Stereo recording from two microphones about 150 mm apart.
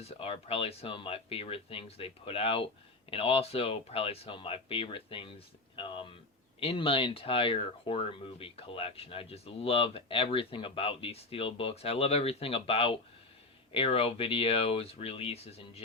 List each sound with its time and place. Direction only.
0.0 s speech: 40° left (ahead or behind)